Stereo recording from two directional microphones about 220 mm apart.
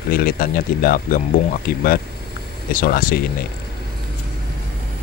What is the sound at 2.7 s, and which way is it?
Speech, 40° left (ahead or behind).